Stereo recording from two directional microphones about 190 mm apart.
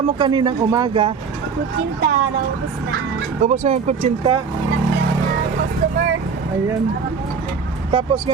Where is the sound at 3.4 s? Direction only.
35° right (ahead or behind).